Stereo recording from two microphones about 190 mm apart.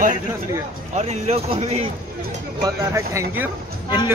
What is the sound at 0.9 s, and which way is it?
Speech, 35° right (ahead or behind).